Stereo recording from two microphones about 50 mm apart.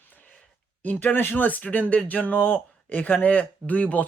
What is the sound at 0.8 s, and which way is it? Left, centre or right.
Speech, left.